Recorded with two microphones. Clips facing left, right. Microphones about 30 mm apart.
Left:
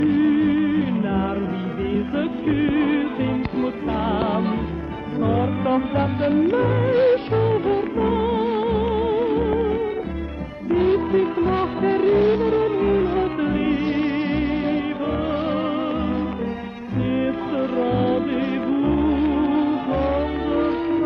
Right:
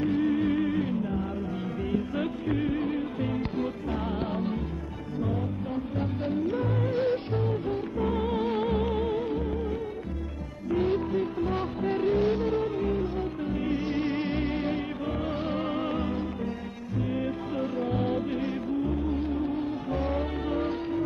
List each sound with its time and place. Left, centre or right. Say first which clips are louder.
0.0 s music: left 8 dB; left
2.0 s music: left 6 dB; left
3.2 s music: left 7 dB; left
4.1 s music: left 9 dB; left
5.2 s music: left 11 dB; left
6.2 s music: left 10 dB; left
8.0 s music: left 7 dB; left
10.7 s music of bollywood: left 8 dB; left
13.7 s music: left 7 dB; left
17.1 s music: left 10 dB; left
18.7 s music: left 11 dB; left